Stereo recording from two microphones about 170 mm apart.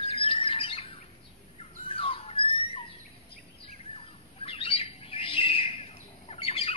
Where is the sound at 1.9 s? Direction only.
35° left (ahead or behind).